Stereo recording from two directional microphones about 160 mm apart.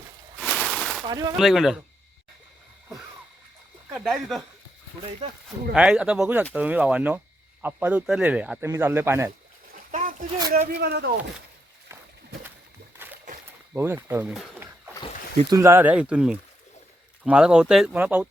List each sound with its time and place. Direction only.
0.4 s a sound: 5° left (ahead or behind)
1.0 s speech: 25° right (ahead or behind)
1.4 s speech: centre (ahead or behind)
3.9 s speech: centre (ahead or behind)
5.7 s speech: 5° right (ahead or behind)
9.7 s splash: 55° right (ahead or behind)
10.8 s speech: 90° right
13.7 s speech: 15° right (ahead or behind)
14.6 s a sound: 15° right (ahead or behind)
15.4 s speech: 20° right (ahead or behind)